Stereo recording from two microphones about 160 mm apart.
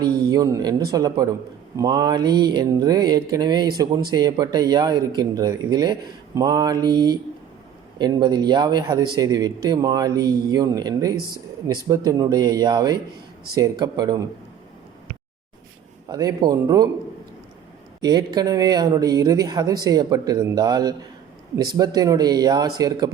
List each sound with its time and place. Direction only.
0.3 s a man's voice: 20° right (ahead or behind)
16.0 s a man's voice: 25° right (ahead or behind)
18.0 s a man's voice: 25° right (ahead or behind)